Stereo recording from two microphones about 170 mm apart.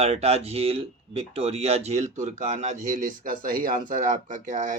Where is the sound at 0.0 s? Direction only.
40° right (ahead or behind).